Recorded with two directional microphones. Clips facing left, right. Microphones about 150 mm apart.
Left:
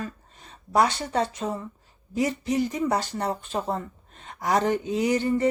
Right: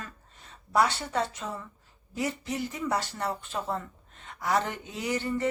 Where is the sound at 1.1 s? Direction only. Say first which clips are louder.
Left 5 dB; 35° left (ahead or behind).